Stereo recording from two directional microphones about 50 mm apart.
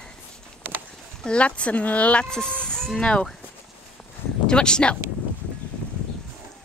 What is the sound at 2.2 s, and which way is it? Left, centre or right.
Speech, centre.